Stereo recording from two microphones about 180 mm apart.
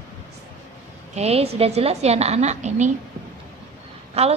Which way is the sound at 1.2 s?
35° right (ahead or behind).